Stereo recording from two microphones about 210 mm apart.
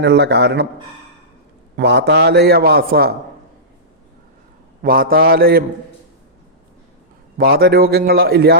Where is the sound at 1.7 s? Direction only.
55° right (ahead or behind).